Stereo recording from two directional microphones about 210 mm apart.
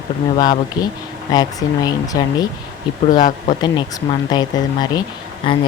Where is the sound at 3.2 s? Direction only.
35° left (ahead or behind).